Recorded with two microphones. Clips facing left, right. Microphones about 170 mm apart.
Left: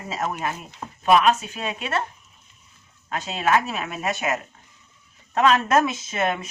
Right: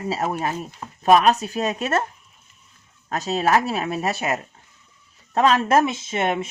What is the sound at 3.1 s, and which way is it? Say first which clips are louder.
Speech: right 2 dB; 40° right (ahead or behind).